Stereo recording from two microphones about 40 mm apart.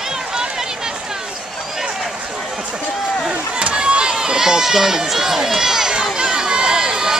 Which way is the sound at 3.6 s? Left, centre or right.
Right.